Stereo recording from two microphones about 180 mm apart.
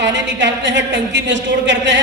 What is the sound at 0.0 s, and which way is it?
A woman's voice, 80° right.